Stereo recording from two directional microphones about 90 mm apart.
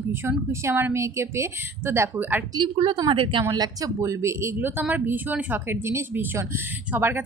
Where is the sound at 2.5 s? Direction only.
65° right (ahead or behind).